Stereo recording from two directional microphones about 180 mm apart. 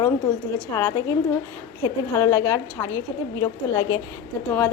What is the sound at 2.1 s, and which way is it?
A woman's voice, 20° left (ahead or behind).